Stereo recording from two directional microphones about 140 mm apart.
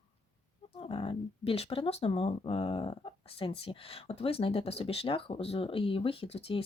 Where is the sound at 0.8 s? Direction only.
40° left (ahead or behind).